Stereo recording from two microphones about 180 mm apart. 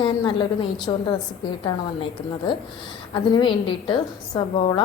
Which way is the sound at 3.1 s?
25° left (ahead or behind).